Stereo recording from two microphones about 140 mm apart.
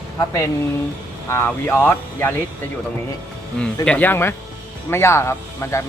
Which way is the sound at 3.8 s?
10° left (ahead or behind).